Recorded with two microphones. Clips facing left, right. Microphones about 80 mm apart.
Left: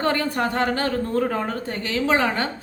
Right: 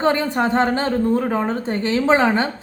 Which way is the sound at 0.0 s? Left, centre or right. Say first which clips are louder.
Right 4 dB; right.